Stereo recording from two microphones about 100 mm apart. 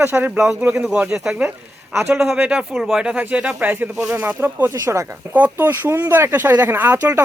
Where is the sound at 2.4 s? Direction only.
10° right (ahead or behind); by 5.0 s 30° right (ahead or behind).